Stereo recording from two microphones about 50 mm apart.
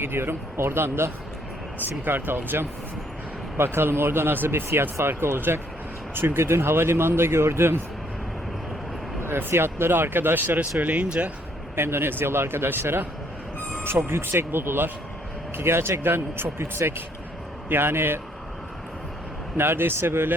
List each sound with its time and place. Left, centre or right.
0.0 s speech: right
2.0 s speech: right
9.2 s speech: right
10.8 s speech: right
11.8 s speech: right
13.8 s speech: right
19.5 s speech: right